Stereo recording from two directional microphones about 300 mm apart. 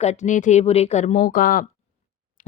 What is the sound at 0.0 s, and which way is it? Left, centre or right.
Speech, left.